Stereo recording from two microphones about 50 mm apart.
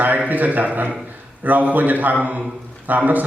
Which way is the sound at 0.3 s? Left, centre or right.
Right.